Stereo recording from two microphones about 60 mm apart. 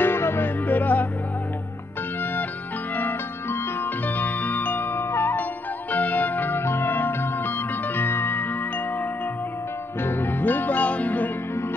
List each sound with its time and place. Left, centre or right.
0.0 s music: left
3.0 s music: left
4.1 s music: left
10.0 s music: left